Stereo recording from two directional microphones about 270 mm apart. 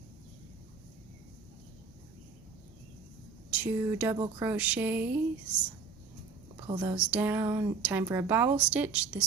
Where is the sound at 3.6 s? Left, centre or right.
Centre.